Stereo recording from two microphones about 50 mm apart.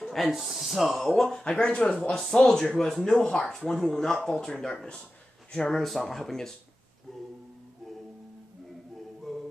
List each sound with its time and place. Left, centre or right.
0.0 s speech: centre
1.4 s speech: left
2.2 s speech: centre
9.3 s music: centre